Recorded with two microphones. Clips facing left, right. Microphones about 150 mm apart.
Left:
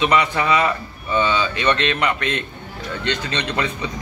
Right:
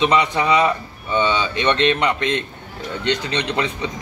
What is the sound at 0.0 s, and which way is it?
A man's voice, 20° right (ahead or behind).